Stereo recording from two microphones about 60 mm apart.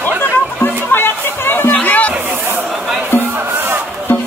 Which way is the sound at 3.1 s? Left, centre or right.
Left.